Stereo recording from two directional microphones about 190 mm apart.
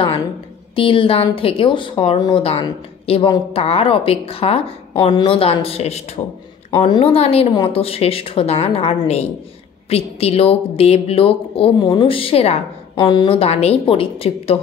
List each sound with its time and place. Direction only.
0.7 s a woman's voice: 25° left (ahead or behind)